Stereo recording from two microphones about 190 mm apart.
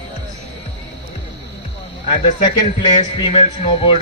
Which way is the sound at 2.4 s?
25° left (ahead or behind).